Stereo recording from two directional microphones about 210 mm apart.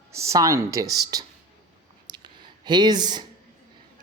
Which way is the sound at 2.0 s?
20° right (ahead or behind).